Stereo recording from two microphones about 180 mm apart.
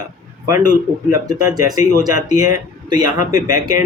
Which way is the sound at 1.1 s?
20° right (ahead or behind).